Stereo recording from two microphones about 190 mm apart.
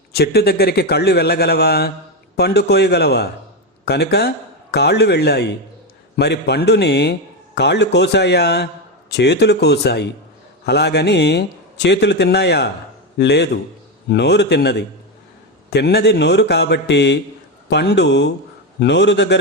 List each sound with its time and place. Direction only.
0.1 s a man's voice: 55° left (ahead or behind)